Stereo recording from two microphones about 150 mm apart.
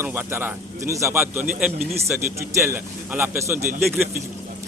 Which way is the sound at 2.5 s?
15° right (ahead or behind).